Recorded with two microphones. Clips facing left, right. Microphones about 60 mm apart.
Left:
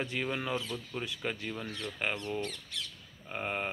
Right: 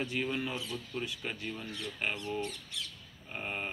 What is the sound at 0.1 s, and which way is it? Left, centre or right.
Speech, left.